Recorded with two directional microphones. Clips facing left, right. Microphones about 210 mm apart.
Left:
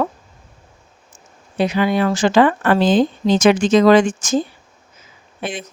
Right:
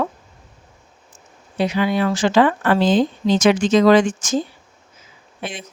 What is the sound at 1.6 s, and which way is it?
Speech, 50° left (ahead or behind).